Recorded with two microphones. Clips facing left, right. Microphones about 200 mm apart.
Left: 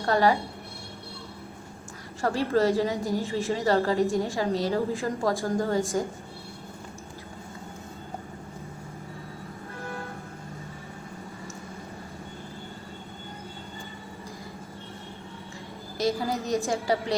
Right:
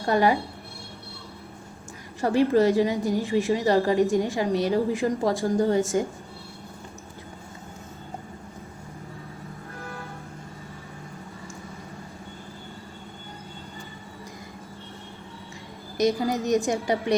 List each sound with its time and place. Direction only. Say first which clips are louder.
0.0 s a woman's voice: right 1 dB; 15° right (ahead or behind)
2.2 s a woman's voice: right 4 dB; 15° right (ahead or behind)
5.8 s speech: right 3 dB; centre (ahead or behind)
16.0 s a woman's voice: right 4 dB; 20° right (ahead or behind)